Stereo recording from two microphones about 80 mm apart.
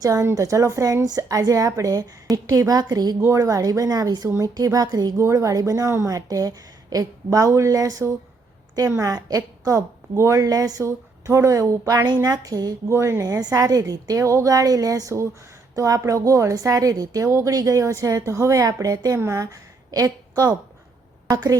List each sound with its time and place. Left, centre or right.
0.0 s speech: right
3.2 s speech: right
5.2 s a woman's voice: right
12.9 s a woman's voice: right
13.4 s a woman's voice: right